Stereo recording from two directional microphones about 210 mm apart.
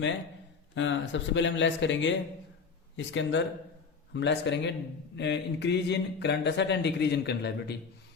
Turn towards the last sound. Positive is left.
turn(degrees=50)  # may be behind; listen again after turning